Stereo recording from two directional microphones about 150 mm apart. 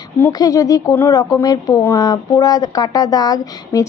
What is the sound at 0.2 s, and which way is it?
Speech, 20° left (ahead or behind).